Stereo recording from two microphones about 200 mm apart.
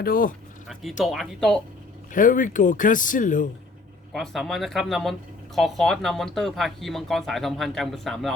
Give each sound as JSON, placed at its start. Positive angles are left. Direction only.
{"t": 0.0, "sound": "speech", "side_deg": 45}
{"t": 0.7, "sound": "speech", "side_deg": 0}
{"t": 2.1, "sound": "speech", "side_deg": 40}
{"t": 4.1, "sound": "speech", "side_deg": 0}